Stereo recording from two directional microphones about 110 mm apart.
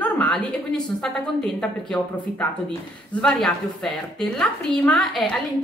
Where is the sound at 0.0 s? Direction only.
10° left (ahead or behind).